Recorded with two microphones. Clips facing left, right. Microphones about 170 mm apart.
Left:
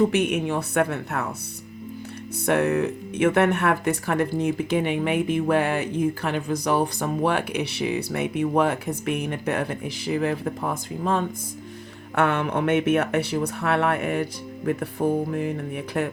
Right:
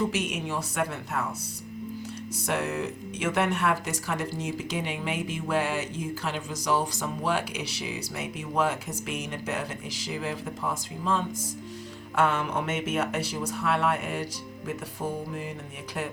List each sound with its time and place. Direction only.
0.1 s speech: 60° left (ahead or behind)
2.5 s speech: 60° left (ahead or behind)